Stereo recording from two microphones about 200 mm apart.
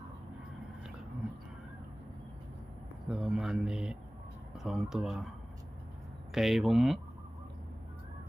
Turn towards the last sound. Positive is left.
turn(degrees=0)  # may be behind; listen again after turning